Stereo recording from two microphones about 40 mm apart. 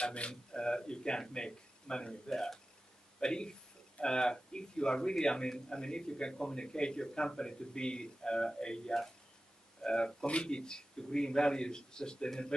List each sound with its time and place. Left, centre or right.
0.0 s speech: left